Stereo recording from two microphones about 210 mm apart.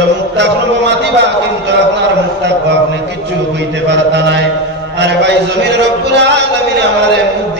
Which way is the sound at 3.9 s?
55° right (ahead or behind).